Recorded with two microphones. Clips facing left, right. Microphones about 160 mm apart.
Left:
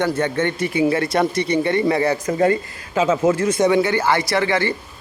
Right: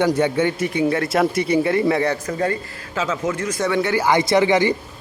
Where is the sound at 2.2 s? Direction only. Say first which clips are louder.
Left 5 dB; 20° left (ahead or behind).